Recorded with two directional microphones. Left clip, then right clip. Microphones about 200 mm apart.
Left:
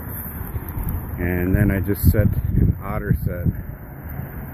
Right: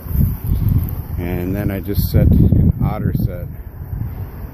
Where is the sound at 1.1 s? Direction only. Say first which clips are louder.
Left 1 dB; 15° right (ahead or behind).